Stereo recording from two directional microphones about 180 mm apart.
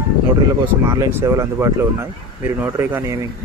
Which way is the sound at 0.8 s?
15° right (ahead or behind).